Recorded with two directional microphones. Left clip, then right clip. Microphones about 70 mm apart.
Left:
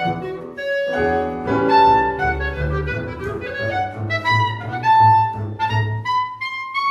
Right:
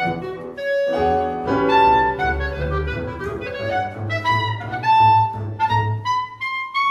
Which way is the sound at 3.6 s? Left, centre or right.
Centre.